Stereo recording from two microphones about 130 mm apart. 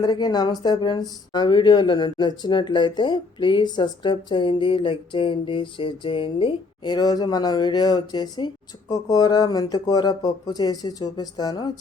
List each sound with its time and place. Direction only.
0.0 s speech: 35° left (ahead or behind)